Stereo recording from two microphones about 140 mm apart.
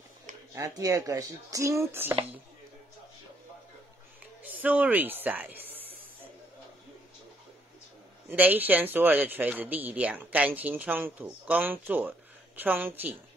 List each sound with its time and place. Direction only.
0.6 s speech: 25° right (ahead or behind)
4.5 s speech: 10° right (ahead or behind)
8.3 s speech: 10° right (ahead or behind)